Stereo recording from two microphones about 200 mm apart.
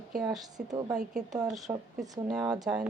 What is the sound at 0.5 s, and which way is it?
Speech, 20° right (ahead or behind).